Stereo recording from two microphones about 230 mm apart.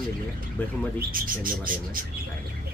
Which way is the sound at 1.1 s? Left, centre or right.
Right.